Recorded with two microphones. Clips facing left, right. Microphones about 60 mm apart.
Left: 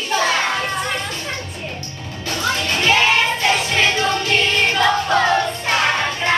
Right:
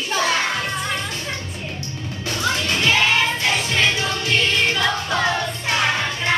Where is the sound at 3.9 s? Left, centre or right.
Left.